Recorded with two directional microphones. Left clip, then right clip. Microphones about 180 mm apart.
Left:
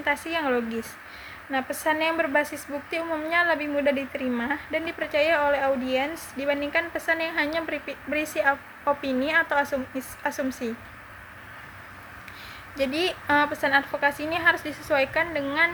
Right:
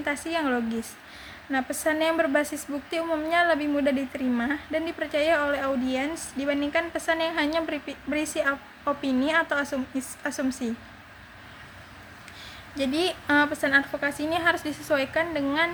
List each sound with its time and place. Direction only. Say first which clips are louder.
0.0 s a woman's voice: left 2 dB; 20° right (ahead or behind)
12.7 s a woman's voice: left 1 dB; 20° right (ahead or behind)